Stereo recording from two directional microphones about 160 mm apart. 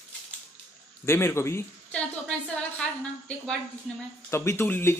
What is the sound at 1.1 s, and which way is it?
Speech, 15° left (ahead or behind).